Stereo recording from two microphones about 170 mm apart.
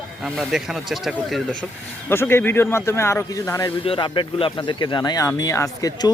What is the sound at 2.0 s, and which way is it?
Speech, 15° left (ahead or behind).